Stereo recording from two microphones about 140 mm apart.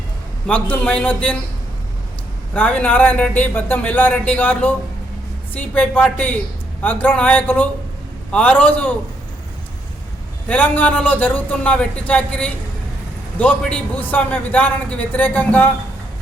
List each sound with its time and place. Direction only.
0.4 s a man's voice: 10° left (ahead or behind)
2.5 s a man's voice: 10° left (ahead or behind)
10.5 s a man's voice: 10° left (ahead or behind)